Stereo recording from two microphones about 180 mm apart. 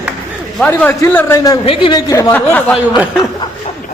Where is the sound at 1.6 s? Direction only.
30° left (ahead or behind); by 2.7 s 10° left (ahead or behind).